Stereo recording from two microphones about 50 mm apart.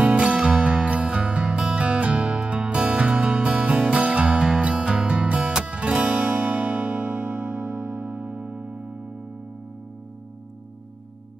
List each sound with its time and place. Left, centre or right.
0.0 s music: right